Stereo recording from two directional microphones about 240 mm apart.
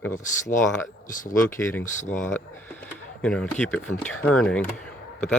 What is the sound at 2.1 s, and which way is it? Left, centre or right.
Speech, centre.